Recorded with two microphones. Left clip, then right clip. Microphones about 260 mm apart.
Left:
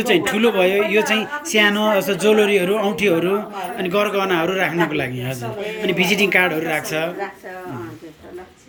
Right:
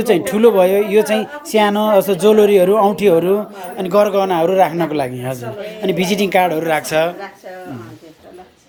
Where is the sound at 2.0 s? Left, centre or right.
Right.